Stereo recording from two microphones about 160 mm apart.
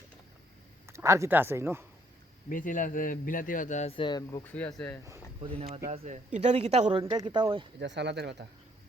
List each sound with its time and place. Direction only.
0.9 s speech: 15° right (ahead or behind)
2.5 s speech: 55° left (ahead or behind)
3.9 s speech: 30° left (ahead or behind)
4.4 s speech: 10° left (ahead or behind)
5.4 s speech: 40° right (ahead or behind)
7.0 s speech: 25° right (ahead or behind)
7.8 s speech: 90° right